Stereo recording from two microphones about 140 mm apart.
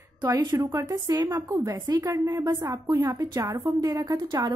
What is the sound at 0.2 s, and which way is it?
A woman's voice, 30° right (ahead or behind).